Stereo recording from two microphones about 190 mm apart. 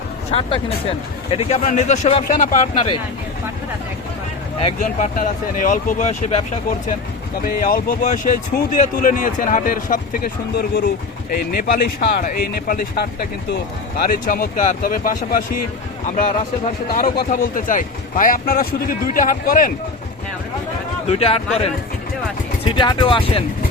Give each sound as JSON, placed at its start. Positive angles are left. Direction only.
{"t": 0.3, "sound": "speech", "side_deg": 30}
{"t": 4.6, "sound": "speech", "side_deg": 40}
{"t": 7.4, "sound": "speech", "side_deg": 50}
{"t": 16.9, "sound": "speech", "side_deg": 50}
{"t": 21.1, "sound": "speech", "side_deg": 30}